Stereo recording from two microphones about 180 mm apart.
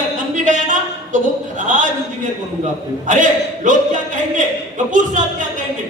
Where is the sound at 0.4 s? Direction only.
45° right (ahead or behind).